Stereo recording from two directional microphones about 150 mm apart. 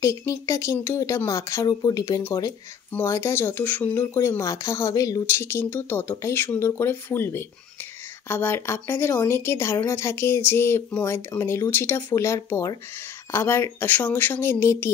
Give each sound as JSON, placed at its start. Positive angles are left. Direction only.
{"t": 0.0, "sound": "speech", "side_deg": 20}
{"t": 2.9, "sound": "speech", "side_deg": 15}